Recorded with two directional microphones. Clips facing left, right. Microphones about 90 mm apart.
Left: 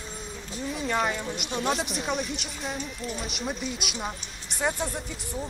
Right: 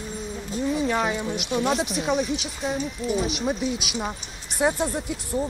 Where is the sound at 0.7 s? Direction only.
Centre (ahead or behind).